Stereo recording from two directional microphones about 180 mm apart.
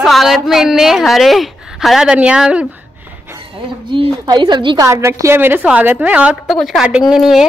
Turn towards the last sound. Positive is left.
turn(degrees=0)  # may be behind; listen again after turning